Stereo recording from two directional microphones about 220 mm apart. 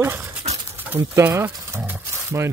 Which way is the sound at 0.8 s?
10° right (ahead or behind).